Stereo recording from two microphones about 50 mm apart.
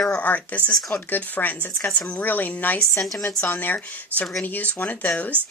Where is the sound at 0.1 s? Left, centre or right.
Left.